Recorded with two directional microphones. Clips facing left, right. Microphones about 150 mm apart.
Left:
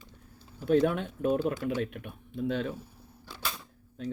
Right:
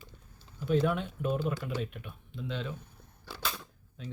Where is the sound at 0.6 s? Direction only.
50° left (ahead or behind).